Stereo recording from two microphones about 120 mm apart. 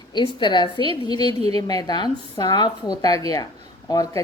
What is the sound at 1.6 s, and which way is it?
A woman's voice, 35° left (ahead or behind).